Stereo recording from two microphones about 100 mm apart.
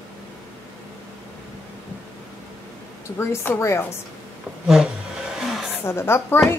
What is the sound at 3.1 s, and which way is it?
Speech, 25° left (ahead or behind).